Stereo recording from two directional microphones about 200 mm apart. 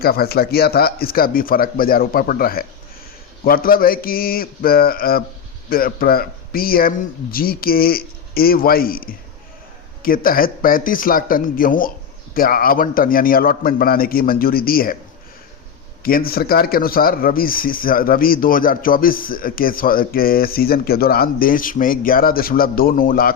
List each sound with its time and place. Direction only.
0.0 s speech: 50° left (ahead or behind)
16.0 s speech: 45° left (ahead or behind)